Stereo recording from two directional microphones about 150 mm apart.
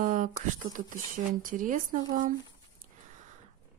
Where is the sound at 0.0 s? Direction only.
60° right (ahead or behind).